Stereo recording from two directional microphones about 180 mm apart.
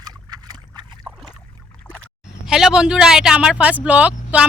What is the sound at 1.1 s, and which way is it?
Boat, 10° right (ahead or behind).